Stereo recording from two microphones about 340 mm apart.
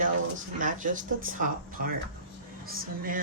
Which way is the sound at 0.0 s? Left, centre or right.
Right.